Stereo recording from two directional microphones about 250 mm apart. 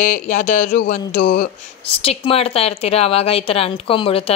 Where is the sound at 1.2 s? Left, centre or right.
Left.